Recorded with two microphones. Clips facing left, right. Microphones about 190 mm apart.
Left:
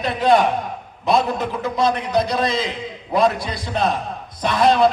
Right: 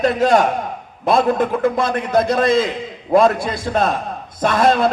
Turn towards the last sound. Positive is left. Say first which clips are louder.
# right 1 dB
turn(degrees=-50)  # may be behind; listen again after turning